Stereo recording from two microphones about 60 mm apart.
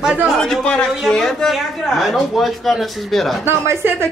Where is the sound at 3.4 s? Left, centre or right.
Right.